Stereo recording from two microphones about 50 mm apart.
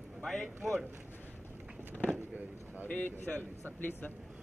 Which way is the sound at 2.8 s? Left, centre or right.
Left.